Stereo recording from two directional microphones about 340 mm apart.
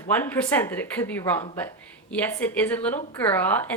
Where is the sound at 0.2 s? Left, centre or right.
Centre.